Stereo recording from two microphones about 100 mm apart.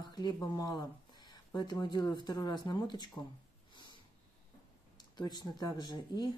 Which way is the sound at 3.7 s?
50° left (ahead or behind).